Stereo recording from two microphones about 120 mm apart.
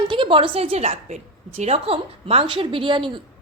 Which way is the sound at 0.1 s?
45° right (ahead or behind).